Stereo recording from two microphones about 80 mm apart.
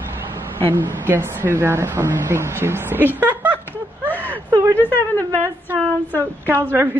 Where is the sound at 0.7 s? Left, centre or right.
Right.